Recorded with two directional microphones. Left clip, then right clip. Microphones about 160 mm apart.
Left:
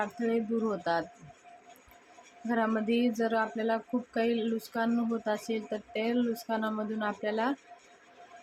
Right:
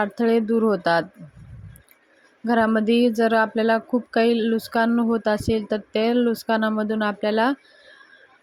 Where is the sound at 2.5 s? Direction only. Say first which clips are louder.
Right 10 dB; 50° right (ahead or behind).